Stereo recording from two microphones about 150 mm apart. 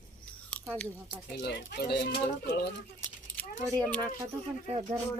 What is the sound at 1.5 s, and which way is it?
Speech, 90° left.